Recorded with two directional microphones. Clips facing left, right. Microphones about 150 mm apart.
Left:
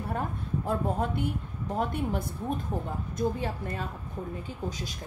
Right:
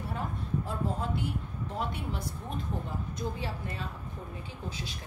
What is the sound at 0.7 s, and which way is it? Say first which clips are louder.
A woman's voice: left 8 dB; 55° left (ahead or behind).